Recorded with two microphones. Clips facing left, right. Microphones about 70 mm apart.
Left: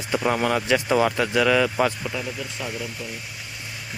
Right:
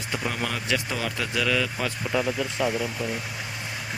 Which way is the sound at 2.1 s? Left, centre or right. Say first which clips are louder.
Right 4 dB; centre.